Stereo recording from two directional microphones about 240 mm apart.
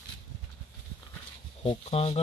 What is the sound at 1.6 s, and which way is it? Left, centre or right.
Speech, left.